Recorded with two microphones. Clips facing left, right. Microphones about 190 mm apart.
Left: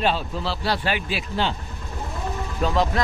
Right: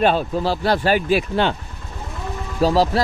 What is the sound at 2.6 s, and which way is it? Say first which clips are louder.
Speech: right 6 dB; 35° right (ahead or behind).